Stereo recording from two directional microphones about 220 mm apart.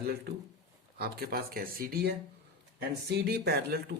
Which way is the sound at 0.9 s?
45° right (ahead or behind).